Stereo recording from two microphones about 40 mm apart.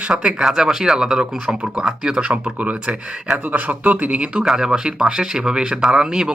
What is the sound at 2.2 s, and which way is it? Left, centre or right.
Speech, right.